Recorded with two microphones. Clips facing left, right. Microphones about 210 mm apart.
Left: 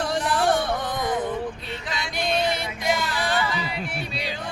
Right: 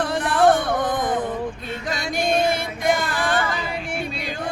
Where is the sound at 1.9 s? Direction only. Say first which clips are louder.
Right 4 dB; 45° right (ahead or behind).